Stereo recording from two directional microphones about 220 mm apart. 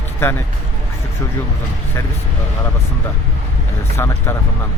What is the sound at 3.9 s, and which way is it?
Speech, 10° left (ahead or behind).